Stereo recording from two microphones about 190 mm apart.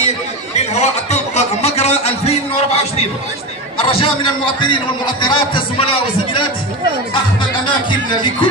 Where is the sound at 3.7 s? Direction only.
30° left (ahead or behind).